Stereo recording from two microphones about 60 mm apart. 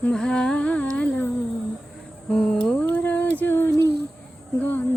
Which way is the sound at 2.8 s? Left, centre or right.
Left.